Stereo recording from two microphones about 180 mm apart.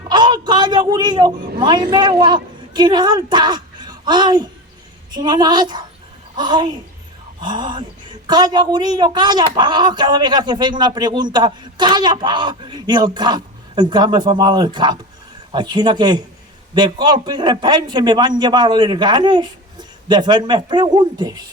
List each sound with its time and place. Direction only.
0.1 s a man's voice: 25° right (ahead or behind)